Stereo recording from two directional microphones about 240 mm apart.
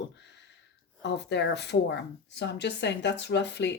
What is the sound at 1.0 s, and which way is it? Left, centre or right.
Speech, left.